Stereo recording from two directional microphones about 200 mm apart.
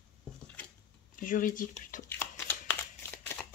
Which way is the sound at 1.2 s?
40° left (ahead or behind).